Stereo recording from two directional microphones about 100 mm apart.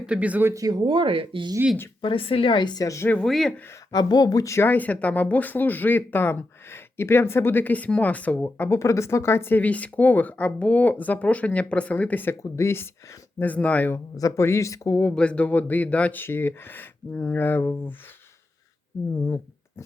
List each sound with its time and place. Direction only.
0.0 s speech: 10° right (ahead or behind)
0.5 s speech: 35° right (ahead or behind)
0.9 s speech: 60° right (ahead or behind)
2.0 s a woman's voice: 65° left (ahead or behind); by 3.1 s 30° left (ahead or behind)
3.2 s speech: 5° left (ahead or behind)
3.9 s speech: 40° left (ahead or behind); by 14.0 s 15° left (ahead or behind)
14.2 s speech: 30° left (ahead or behind)
15.1 s speech: 10° left (ahead or behind)